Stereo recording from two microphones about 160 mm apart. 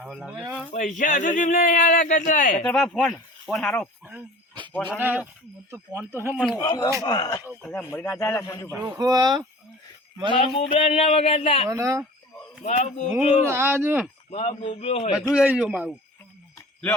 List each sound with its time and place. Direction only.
0.0 s speech: 5° right (ahead or behind)
0.7 s speech: 50° left (ahead or behind)
2.6 s speech: 5° left (ahead or behind)
4.9 s speech: 10° right (ahead or behind)
6.3 s speech: 5° left (ahead or behind)
6.6 s speech: 25° left (ahead or behind)
7.6 s a man's voice: 15° left (ahead or behind)
8.8 s speech: 25° right (ahead or behind)
10.3 s speech: 35° left (ahead or behind)
11.7 s speech: 20° right (ahead or behind)
12.6 s speech: 45° left (ahead or behind)
13.5 s speech: 15° right (ahead or behind)
14.3 s speech: 35° left (ahead or behind)
15.4 s speech: 5° right (ahead or behind)